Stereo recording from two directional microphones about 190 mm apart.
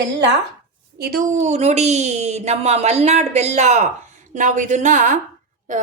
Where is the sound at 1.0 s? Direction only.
50° right (ahead or behind).